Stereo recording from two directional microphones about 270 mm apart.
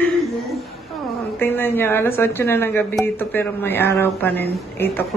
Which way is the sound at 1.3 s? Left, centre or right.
Centre.